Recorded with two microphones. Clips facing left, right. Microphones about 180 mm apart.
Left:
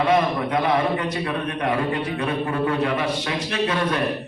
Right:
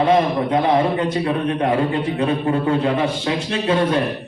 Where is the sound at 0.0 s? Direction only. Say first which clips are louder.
Right 3 dB; 30° right (ahead or behind).